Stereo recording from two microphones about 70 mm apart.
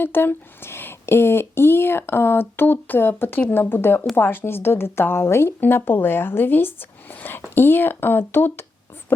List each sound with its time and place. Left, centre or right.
0.0 s speech: left